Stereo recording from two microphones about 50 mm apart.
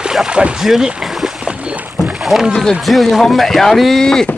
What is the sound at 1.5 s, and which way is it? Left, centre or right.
Boat, right.